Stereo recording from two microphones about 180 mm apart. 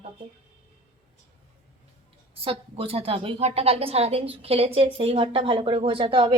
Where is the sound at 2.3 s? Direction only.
30° right (ahead or behind).